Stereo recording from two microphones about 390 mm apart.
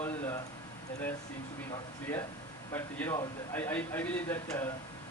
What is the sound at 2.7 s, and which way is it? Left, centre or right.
Speech, centre.